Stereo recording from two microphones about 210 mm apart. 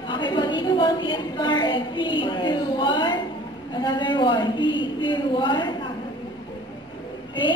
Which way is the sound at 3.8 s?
20° left (ahead or behind).